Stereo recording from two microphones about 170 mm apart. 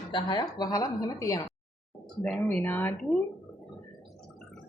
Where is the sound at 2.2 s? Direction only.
5° left (ahead or behind).